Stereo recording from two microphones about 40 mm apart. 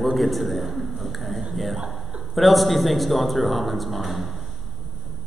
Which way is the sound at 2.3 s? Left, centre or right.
Centre.